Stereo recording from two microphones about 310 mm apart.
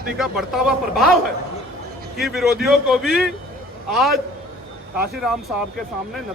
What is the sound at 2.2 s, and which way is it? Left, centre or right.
A man's voice, centre.